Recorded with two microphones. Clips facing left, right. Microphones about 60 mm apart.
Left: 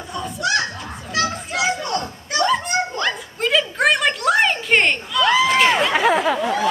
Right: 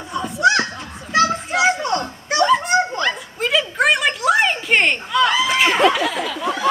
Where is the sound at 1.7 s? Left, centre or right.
Right.